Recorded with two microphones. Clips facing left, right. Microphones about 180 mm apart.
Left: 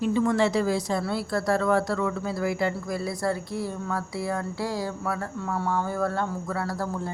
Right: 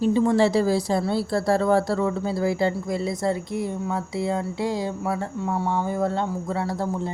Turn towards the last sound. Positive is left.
turn(degrees=-20)  # may be behind; listen again after turning